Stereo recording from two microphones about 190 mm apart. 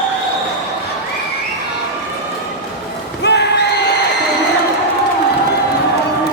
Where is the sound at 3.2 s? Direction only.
60° left (ahead or behind).